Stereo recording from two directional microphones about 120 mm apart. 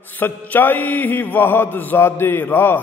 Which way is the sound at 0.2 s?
15° left (ahead or behind).